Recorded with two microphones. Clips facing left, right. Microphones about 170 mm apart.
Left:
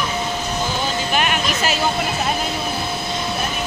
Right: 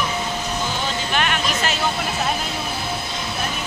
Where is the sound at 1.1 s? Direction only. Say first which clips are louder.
Left 1 dB; 10° left (ahead or behind).